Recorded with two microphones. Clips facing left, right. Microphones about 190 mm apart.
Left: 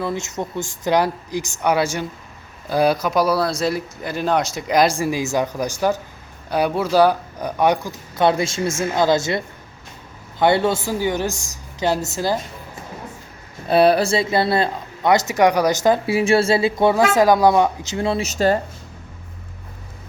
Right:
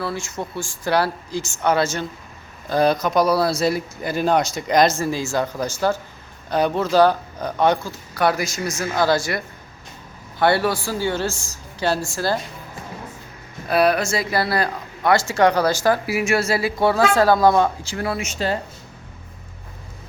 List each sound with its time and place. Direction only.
0.0 s speech: 20° left (ahead or behind)
10.4 s speech: 20° left (ahead or behind)
13.7 s speech: 30° left (ahead or behind)
18.3 s speech: 45° left (ahead or behind)